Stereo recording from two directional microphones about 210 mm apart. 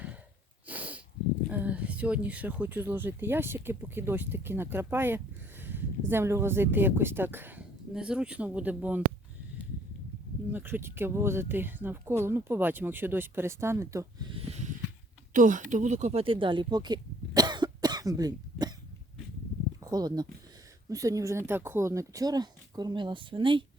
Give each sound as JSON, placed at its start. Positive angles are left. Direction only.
{"t": 0.7, "sound": "sniff", "side_deg": -5}
{"t": 1.5, "sound": "speech", "side_deg": -5}
{"t": 10.5, "sound": "speech", "side_deg": -10}
{"t": 14.3, "sound": "snort", "side_deg": -30}
{"t": 15.3, "sound": "speech", "side_deg": -40}
{"t": 19.8, "sound": "speech", "side_deg": -20}